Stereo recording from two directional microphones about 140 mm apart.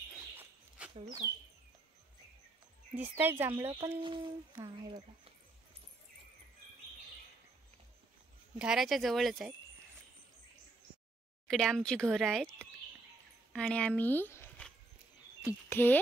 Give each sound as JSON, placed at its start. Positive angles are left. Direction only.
{"t": 0.4, "sound": "dog", "side_deg": -10}
{"t": 2.9, "sound": "speech", "side_deg": -15}
{"t": 4.0, "sound": "speech", "side_deg": -35}
{"t": 8.5, "sound": "speech", "side_deg": -5}
{"t": 11.4, "sound": "speech", "side_deg": 5}
{"t": 15.7, "sound": "speech", "side_deg": 15}